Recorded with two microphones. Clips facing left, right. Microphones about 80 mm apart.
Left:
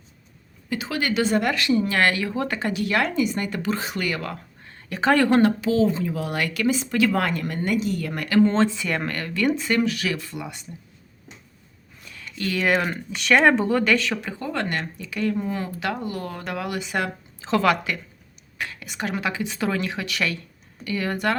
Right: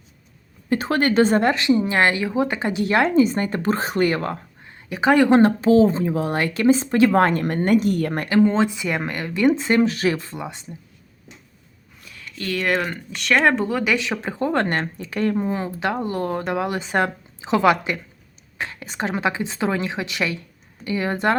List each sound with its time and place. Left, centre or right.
0.7 s speech: right
4.6 s speech: centre
5.4 s speech: right
8.4 s speech: centre
12.0 s speech: centre
13.9 s speech: centre
14.3 s speech: right
15.4 s speech: right
17.4 s speech: centre